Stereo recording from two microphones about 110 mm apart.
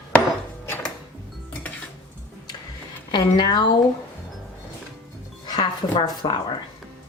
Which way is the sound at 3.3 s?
45° left (ahead or behind).